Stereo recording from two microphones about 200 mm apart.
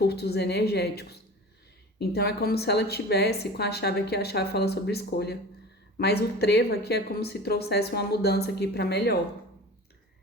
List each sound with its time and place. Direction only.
0.0 s a woman's voice: 55° left (ahead or behind)